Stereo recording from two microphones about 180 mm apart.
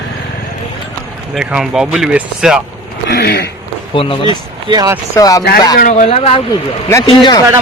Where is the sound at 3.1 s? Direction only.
60° left (ahead or behind).